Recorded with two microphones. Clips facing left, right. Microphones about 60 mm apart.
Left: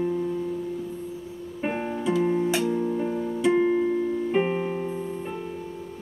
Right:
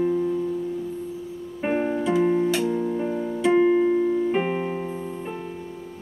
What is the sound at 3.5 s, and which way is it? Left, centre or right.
Music, right.